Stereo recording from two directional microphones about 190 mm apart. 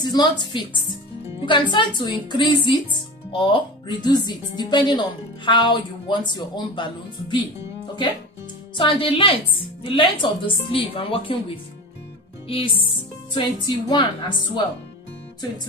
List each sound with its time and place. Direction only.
0.0 s speech: 25° left (ahead or behind)
1.2 s music: 25° left (ahead or behind)
1.7 s speech: 25° left (ahead or behind)
8.8 s speech: 25° left (ahead or behind)